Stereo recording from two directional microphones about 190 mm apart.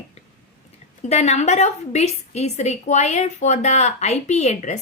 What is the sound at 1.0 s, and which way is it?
A woman's voice, 35° left (ahead or behind).